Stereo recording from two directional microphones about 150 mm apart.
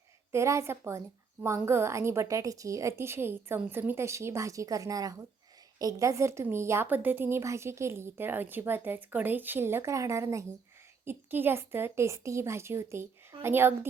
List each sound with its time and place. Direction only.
0.3 s a woman's voice: 20° right (ahead or behind)